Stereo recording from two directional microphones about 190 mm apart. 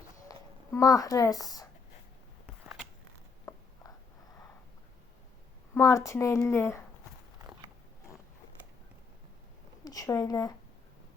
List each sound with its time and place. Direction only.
0.3 s speech: 20° left (ahead or behind)
3.5 s a sound: 15° left (ahead or behind)
5.7 s speech: 15° left (ahead or behind)
9.8 s a woman's voice: 20° left (ahead or behind)